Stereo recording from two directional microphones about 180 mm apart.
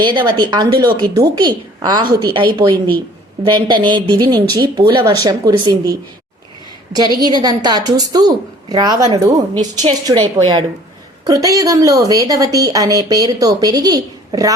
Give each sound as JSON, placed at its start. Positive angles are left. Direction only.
{"t": 0.0, "sound": "a woman's voice", "side_deg": -25}